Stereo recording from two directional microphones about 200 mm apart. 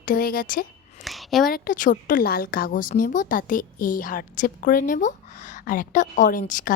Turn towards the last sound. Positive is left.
turn(degrees=40)  # may be behind; listen again after turning